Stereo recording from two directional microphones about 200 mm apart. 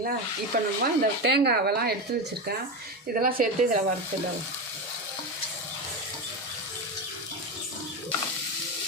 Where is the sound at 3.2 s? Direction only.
45° right (ahead or behind).